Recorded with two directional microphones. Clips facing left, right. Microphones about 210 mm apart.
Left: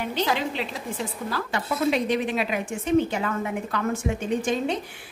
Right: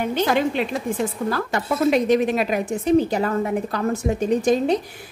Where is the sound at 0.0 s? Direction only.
50° right (ahead or behind).